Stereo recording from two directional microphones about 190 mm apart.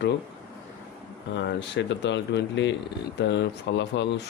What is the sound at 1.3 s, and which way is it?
Speech, 65° left (ahead or behind).